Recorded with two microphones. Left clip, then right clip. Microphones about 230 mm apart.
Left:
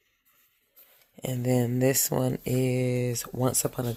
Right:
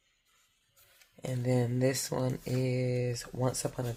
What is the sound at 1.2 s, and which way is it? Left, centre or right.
Speech, left.